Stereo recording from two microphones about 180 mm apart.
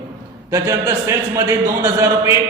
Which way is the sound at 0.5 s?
15° right (ahead or behind).